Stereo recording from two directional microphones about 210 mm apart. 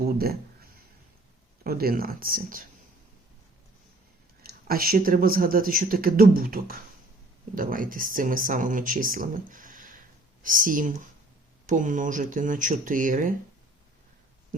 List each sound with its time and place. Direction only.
0.0 s a sound: 45° right (ahead or behind)
1.6 s speech: 45° right (ahead or behind)
4.4 s speech: 45° right (ahead or behind)